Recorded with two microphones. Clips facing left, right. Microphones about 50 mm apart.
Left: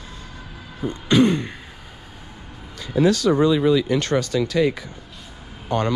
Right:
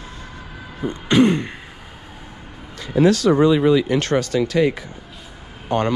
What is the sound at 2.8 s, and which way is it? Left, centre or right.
Speech, right.